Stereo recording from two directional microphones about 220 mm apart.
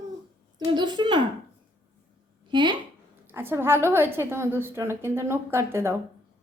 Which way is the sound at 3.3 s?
10° right (ahead or behind).